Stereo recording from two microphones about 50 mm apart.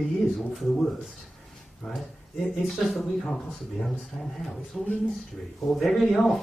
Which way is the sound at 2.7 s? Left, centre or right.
Centre.